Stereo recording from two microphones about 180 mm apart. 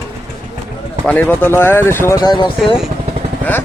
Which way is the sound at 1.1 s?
10° left (ahead or behind).